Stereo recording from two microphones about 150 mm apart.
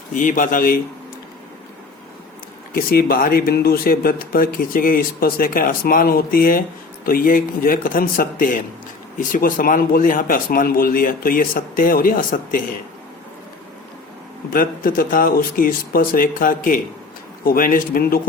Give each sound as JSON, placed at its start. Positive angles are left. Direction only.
{"t": 0.1, "sound": "speech", "side_deg": 60}
{"t": 2.7, "sound": "speech", "side_deg": 80}
{"t": 14.5, "sound": "speech", "side_deg": 70}